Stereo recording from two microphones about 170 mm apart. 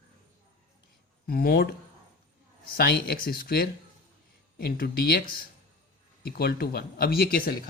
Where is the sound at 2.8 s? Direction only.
65° left (ahead or behind).